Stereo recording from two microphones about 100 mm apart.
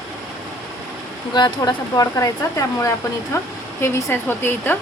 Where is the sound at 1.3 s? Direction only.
45° left (ahead or behind).